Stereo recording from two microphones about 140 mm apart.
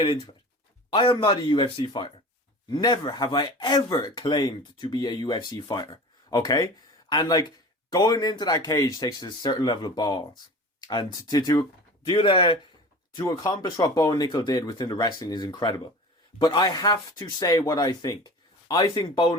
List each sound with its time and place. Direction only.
0.0 s speech: 35° left (ahead or behind)